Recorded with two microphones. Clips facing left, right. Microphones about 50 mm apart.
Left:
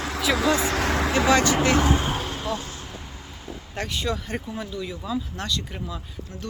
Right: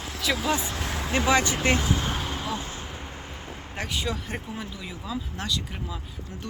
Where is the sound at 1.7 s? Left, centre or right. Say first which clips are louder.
Left 5 dB; left.